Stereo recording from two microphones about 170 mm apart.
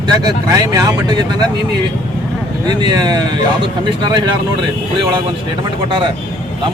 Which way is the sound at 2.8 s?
25° right (ahead or behind).